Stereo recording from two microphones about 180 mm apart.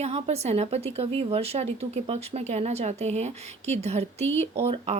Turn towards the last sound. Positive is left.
turn(degrees=-35)  # may be behind; listen again after turning